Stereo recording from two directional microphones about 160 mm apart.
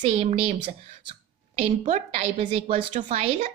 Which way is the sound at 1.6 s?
40° right (ahead or behind).